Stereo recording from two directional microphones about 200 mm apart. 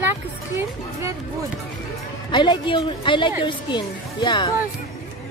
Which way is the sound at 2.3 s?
25° left (ahead or behind).